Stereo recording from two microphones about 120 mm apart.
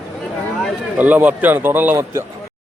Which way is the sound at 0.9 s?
15° right (ahead or behind).